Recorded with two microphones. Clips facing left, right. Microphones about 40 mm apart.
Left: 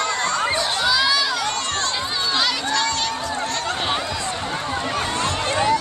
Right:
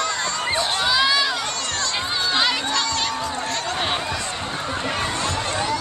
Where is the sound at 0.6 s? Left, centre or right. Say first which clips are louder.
Even; centre.